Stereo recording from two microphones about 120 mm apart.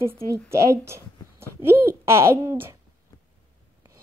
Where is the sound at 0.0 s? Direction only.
25° right (ahead or behind).